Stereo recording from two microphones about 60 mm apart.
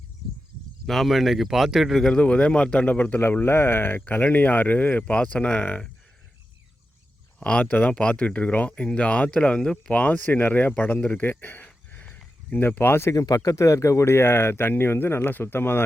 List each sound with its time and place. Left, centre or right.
0.9 s speech: centre
2.0 s speech: centre
7.3 s speech: centre
9.9 s speech: left
13.1 s speech: left